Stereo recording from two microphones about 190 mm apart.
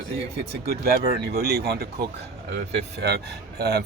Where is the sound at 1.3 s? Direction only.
55° right (ahead or behind).